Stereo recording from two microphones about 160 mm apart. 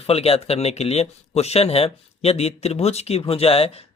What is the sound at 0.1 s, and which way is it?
Speech, 40° left (ahead or behind).